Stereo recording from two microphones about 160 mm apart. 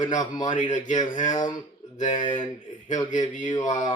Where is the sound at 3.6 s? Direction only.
50° left (ahead or behind).